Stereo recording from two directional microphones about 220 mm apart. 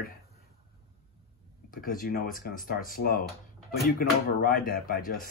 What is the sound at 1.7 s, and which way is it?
Speech, 40° left (ahead or behind).